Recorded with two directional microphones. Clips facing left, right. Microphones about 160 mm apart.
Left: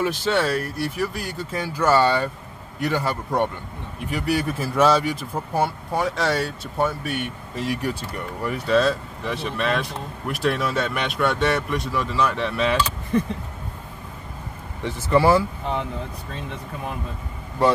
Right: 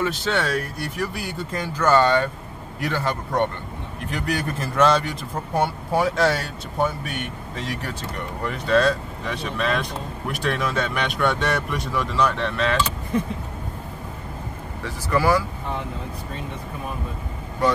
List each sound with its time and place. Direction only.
0.0 s a man's voice: 10° left (ahead or behind)
14.8 s speech: 25° left (ahead or behind)